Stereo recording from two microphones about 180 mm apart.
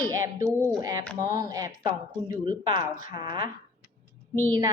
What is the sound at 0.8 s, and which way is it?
A woman's voice, 20° right (ahead or behind).